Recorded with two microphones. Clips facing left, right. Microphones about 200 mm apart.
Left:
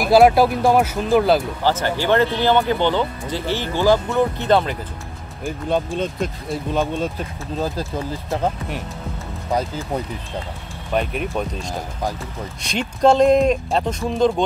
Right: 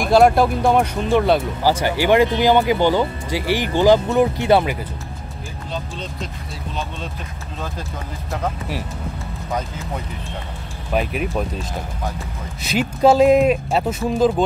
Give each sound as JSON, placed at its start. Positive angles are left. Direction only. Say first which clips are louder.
{"t": 0.0, "sound": "speech", "louder": "left 1 dB", "side_deg": 5}
{"t": 1.6, "sound": "speech", "louder": "right 2 dB", "side_deg": -10}
{"t": 5.7, "sound": "speech", "louder": "left 9 dB", "side_deg": 55}
{"t": 7.5, "sound": "speech", "louder": "left 7 dB", "side_deg": 35}
{"t": 10.9, "sound": "speech", "louder": "right 1 dB", "side_deg": -5}
{"t": 12.6, "sound": "speech", "louder": "right 1 dB", "side_deg": -5}